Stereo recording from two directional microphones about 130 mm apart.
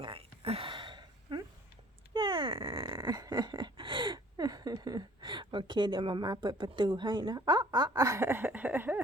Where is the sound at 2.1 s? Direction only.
40° right (ahead or behind).